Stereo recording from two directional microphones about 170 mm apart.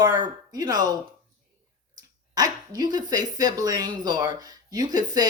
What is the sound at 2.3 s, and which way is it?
Speech, 20° right (ahead or behind).